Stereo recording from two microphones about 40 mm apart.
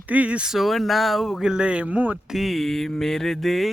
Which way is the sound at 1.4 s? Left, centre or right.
Centre.